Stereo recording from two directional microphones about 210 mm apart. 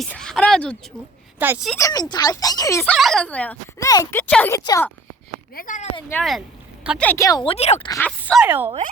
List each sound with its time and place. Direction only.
0.0 s speech: 5° left (ahead or behind)
1.4 s a woman's voice: 5° right (ahead or behind)
1.7 s speech: 15° left (ahead or behind)
5.5 s speech: 40° left (ahead or behind)
6.1 s speech: 5° left (ahead or behind)
7.1 s speech: 15° left (ahead or behind)
7.9 s speech: 10° left (ahead or behind)
8.4 s a woman's voice: 10° right (ahead or behind)